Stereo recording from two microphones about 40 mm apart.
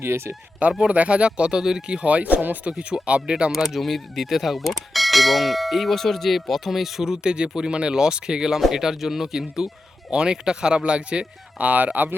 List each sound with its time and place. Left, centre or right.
0.9 s speech: right
1.5 s speech: centre
2.0 s speech: right
3.5 s speech: centre
7.1 s speech: right
10.1 s speech: right
11.5 s speech: right